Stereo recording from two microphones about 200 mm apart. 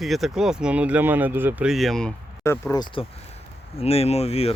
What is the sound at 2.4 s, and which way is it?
Speech, 15° left (ahead or behind).